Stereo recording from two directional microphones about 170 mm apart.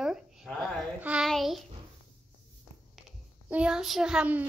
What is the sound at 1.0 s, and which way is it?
Child singing, 5° right (ahead or behind).